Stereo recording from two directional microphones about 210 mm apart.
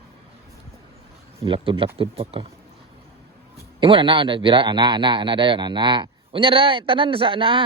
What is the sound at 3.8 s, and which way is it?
A man's voice, 25° right (ahead or behind).